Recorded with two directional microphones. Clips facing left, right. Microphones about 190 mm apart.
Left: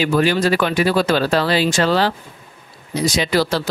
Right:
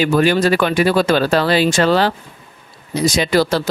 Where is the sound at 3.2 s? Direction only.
50° right (ahead or behind).